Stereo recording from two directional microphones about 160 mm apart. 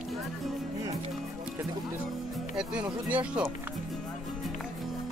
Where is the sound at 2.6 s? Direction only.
5° right (ahead or behind).